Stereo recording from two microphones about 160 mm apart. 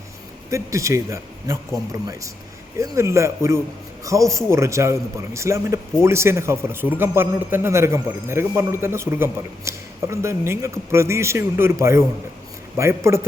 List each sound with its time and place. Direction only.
0.5 s a man's voice: 20° right (ahead or behind)